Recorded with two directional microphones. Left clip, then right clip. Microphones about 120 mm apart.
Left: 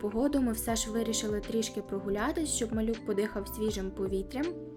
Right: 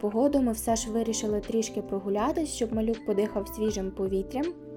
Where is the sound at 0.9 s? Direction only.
65° left (ahead or behind).